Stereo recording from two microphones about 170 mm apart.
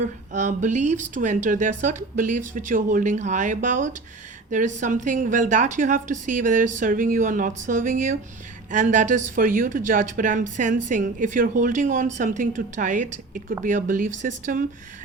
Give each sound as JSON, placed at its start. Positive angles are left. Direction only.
{"t": 0.0, "sound": "speech", "side_deg": -45}